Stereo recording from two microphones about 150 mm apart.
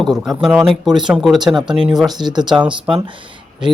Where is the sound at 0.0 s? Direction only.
Centre (ahead or behind).